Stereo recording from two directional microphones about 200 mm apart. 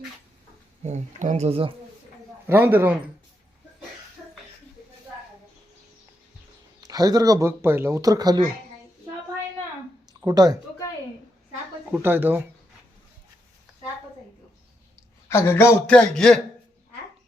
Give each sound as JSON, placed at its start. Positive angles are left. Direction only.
{"t": 0.8, "sound": "speech", "side_deg": -35}
{"t": 2.5, "sound": "speech", "side_deg": -10}
{"t": 6.8, "sound": "speech", "side_deg": -20}
{"t": 10.2, "sound": "speech", "side_deg": -15}
{"t": 11.9, "sound": "speech", "side_deg": -10}
{"t": 15.3, "sound": "speech", "side_deg": 10}